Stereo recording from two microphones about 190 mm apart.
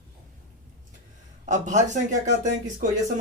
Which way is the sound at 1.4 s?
40° right (ahead or behind).